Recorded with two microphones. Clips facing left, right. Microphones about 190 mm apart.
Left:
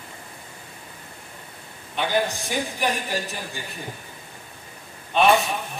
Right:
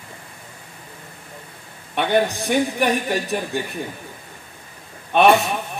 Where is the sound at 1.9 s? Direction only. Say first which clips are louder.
Right 5 dB; 60° right (ahead or behind).